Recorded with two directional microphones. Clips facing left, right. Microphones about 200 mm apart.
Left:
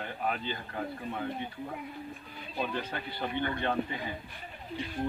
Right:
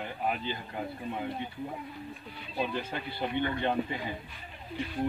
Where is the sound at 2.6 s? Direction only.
15° right (ahead or behind).